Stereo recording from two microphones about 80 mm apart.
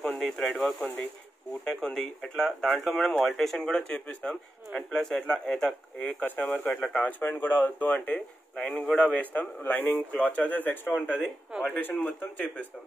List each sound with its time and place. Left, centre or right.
0.2 s speech: centre
5.9 s speech: centre